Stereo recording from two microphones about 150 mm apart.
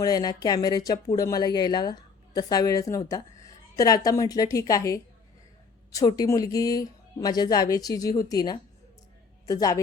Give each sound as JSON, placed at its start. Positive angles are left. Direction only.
{"t": 0.0, "sound": "speech", "side_deg": 25}